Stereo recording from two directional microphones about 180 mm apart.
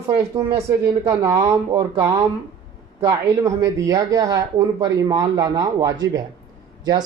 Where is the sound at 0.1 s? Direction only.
20° right (ahead or behind).